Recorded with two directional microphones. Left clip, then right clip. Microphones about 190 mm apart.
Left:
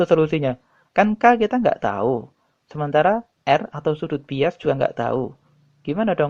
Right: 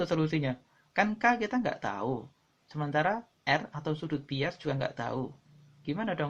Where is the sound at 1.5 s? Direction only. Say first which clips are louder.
Left 12 dB; 30° left (ahead or behind).